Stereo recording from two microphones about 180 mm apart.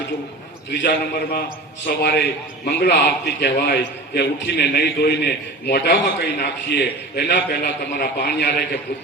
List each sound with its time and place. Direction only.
0.7 s a man's voice: 70° left (ahead or behind)